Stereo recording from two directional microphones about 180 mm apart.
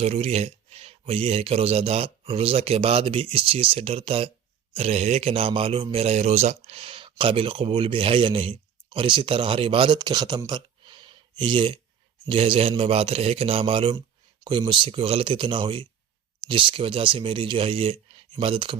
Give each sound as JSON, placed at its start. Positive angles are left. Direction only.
{"t": 0.0, "sound": "a man's voice", "side_deg": -35}